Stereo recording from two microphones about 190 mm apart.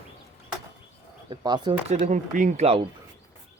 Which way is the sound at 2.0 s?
40° right (ahead or behind).